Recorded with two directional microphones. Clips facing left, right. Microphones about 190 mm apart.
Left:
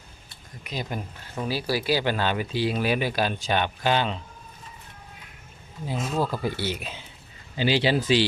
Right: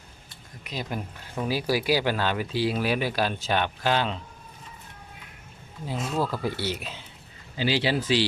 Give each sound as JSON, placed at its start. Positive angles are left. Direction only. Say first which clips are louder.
{"t": 0.6, "sound": "speech", "louder": "left 1 dB", "side_deg": 0}
{"t": 1.5, "sound": "speech", "louder": "right 1 dB", "side_deg": -15}
{"t": 6.1, "sound": "speech", "louder": "left 1 dB", "side_deg": 20}
{"t": 6.4, "sound": "speech", "louder": "left 1 dB", "side_deg": 0}
{"t": 7.5, "sound": "speech", "louder": "left 2 dB", "side_deg": 20}